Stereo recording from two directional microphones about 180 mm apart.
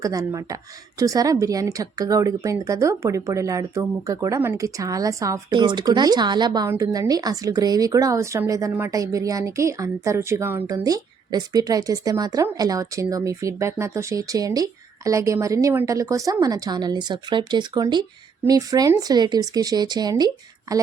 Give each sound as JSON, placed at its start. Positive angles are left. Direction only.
{"t": 0.0, "sound": "a woman's voice", "side_deg": -20}